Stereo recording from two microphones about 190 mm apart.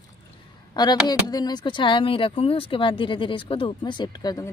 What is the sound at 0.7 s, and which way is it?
Speech, 20° left (ahead or behind).